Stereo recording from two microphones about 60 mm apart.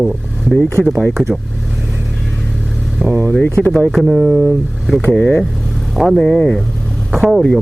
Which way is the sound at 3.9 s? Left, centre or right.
Centre.